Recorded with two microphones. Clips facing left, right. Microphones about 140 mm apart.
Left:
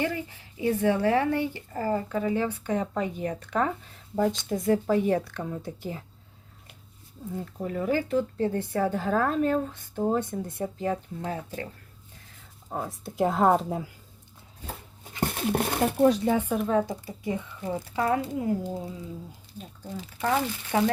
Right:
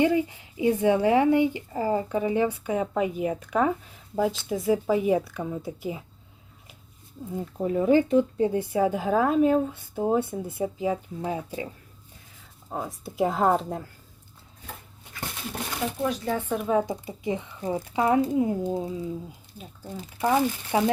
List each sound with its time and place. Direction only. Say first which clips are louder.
0.0 s speech: right 7 dB; 15° right (ahead or behind)
7.3 s speech: right 6 dB; 20° right (ahead or behind)
12.7 s speech: even; centre (ahead or behind)
15.2 s a sound: left 8 dB; 55° left (ahead or behind)
16.6 s speech: right 1 dB; 10° right (ahead or behind)
19.5 s speech: left 1 dB; 10° right (ahead or behind)